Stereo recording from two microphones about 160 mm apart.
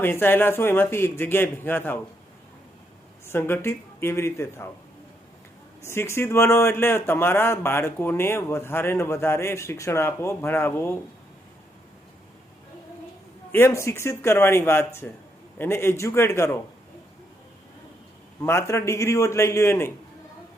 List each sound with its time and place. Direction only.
0.0 s speech: 15° left (ahead or behind)
3.2 s speech: 15° left (ahead or behind)
5.8 s speech: 15° left (ahead or behind)
13.5 s speech: 15° left (ahead or behind)
18.4 s speech: 15° left (ahead or behind)